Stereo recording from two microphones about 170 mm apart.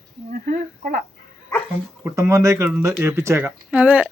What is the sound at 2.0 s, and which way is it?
Speech, 15° right (ahead or behind).